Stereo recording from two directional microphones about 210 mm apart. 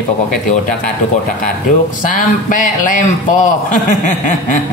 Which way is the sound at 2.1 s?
40° left (ahead or behind).